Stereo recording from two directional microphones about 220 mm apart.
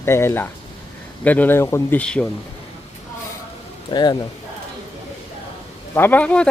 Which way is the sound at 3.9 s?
20° left (ahead or behind).